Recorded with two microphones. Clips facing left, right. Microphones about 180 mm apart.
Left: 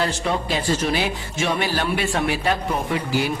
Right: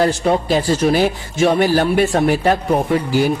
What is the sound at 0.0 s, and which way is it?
A man's voice, 40° right (ahead or behind).